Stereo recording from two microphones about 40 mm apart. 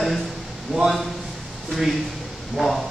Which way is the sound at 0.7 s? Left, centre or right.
Centre.